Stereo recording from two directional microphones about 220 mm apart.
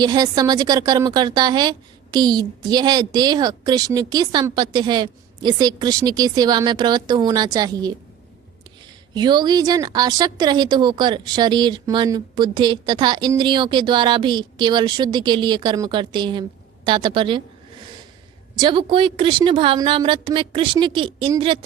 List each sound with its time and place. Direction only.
0.0 s a woman's voice: 15° right (ahead or behind)
9.1 s a woman's voice: 20° right (ahead or behind)
18.5 s a woman's voice: 20° right (ahead or behind)